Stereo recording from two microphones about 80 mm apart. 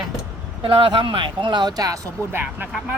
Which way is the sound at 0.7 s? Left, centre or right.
Right.